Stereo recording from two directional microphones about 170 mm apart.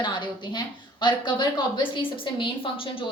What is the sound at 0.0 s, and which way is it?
A woman's voice, 25° left (ahead or behind).